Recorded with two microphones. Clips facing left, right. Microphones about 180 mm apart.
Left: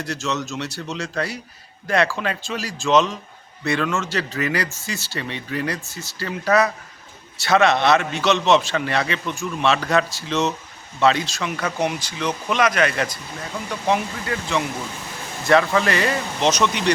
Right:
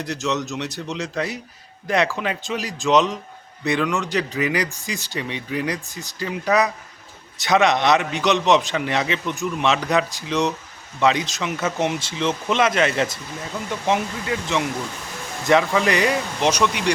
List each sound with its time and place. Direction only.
0.0 s a man's voice: 20° right (ahead or behind)